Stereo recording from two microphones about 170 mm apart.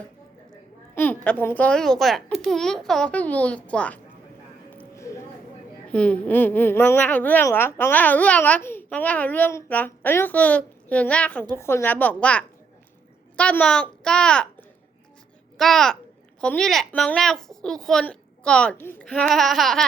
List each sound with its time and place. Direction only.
0.9 s a woman's voice: 10° left (ahead or behind)
4.7 s music: 15° left (ahead or behind)
5.9 s a woman's voice: 10° left (ahead or behind)
15.5 s a child's voice: centre (ahead or behind)